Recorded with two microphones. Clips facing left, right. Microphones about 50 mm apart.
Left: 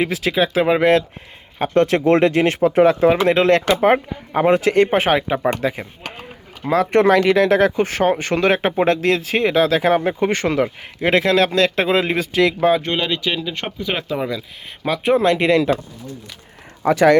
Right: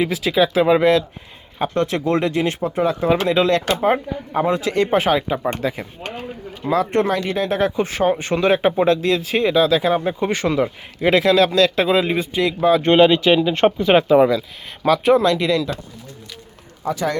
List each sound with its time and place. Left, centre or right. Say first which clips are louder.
0.0 s speech: right 1 dB; left
0.8 s speech: left 1 dB; left
7.8 s speech: left 1 dB; left
12.0 s speech: left 2 dB; left
12.8 s speech: right 8 dB; right
14.8 s speech: right 3 dB; centre
15.2 s speech: left 2 dB; left
16.8 s speech: left 9 dB; left